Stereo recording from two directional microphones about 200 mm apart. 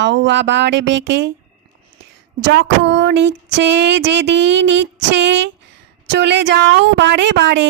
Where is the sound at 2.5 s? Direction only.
60° right (ahead or behind).